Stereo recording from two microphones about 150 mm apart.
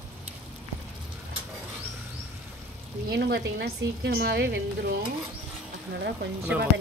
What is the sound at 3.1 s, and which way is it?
A woman's voice, 90° right.